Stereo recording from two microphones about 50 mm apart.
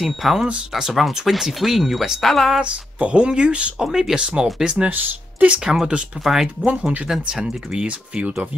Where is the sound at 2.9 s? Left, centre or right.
Right.